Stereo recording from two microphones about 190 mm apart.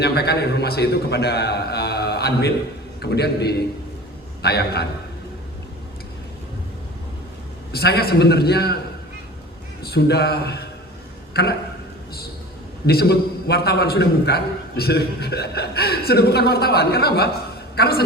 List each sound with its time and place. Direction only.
0.0 s a man's voice: 60° left (ahead or behind)
7.7 s a man's voice: 55° left (ahead or behind)
9.8 s a man's voice: 60° left (ahead or behind)
12.8 s a man's voice: 55° left (ahead or behind)